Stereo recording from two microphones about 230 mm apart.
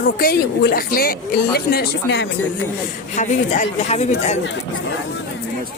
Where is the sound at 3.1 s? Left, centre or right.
Left.